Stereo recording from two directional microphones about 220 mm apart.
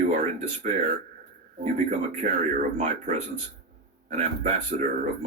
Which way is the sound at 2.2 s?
30° right (ahead or behind).